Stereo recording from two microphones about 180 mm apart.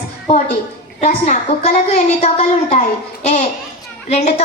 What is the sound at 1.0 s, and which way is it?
A woman's voice, 40° left (ahead or behind).